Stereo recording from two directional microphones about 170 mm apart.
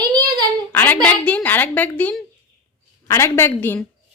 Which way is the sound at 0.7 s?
10° left (ahead or behind).